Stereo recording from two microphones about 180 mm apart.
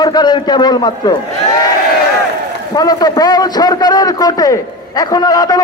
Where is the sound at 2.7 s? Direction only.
20° left (ahead or behind).